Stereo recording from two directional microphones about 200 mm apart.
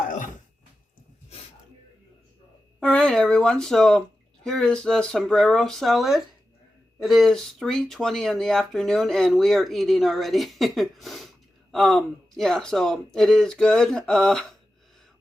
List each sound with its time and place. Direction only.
2.8 s speech: 5° left (ahead or behind)